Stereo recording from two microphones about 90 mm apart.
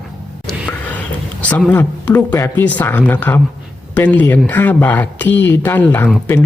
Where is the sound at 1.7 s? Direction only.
20° left (ahead or behind).